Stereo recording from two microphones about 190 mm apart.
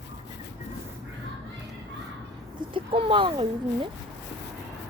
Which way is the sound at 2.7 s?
25° right (ahead or behind).